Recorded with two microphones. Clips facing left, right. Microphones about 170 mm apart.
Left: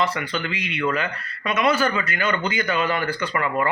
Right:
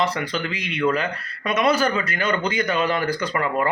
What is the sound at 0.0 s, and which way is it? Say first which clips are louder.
Speech: right 1 dB; 40° right (ahead or behind).